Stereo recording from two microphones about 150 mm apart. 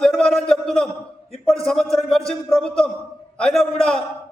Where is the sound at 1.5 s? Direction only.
5° left (ahead or behind).